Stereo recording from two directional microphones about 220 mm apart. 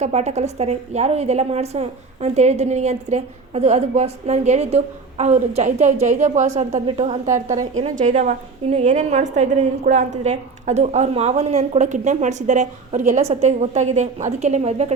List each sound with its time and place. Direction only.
0.0 s a woman's voice: 30° right (ahead or behind)